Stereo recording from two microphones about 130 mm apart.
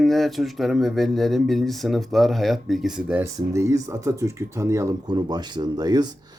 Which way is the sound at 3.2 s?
20° right (ahead or behind).